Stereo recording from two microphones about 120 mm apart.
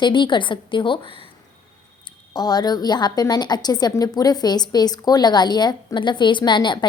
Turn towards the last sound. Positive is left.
turn(degrees=40)  # may be behind; listen again after turning